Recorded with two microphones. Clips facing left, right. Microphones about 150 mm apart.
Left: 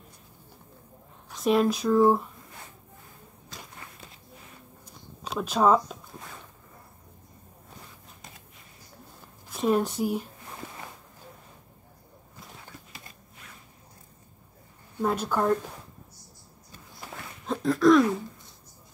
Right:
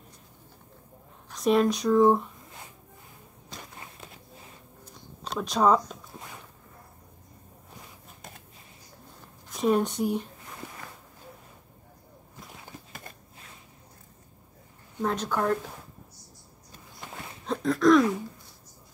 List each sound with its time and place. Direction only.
1.3 s speech: centre (ahead or behind)
5.2 s speech: 5° left (ahead or behind)
9.5 s a woman's voice: centre (ahead or behind)
15.0 s a woman's voice: 10° left (ahead or behind)
17.0 s a sound: 5° left (ahead or behind)